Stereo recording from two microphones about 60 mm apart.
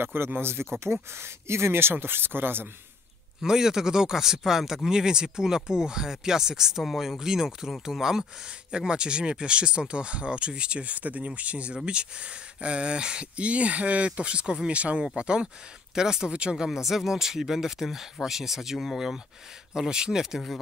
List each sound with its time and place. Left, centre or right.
0.0 s speech: right
3.4 s speech: centre